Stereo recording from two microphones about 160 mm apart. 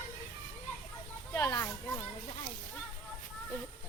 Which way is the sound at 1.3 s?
20° left (ahead or behind).